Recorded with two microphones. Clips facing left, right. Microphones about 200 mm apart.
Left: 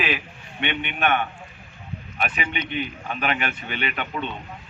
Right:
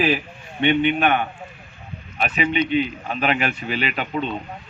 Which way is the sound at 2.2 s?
30° right (ahead or behind).